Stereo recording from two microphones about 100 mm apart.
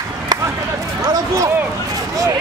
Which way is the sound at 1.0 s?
35° right (ahead or behind).